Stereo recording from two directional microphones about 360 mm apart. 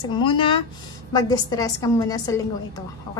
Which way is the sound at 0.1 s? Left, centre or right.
Centre.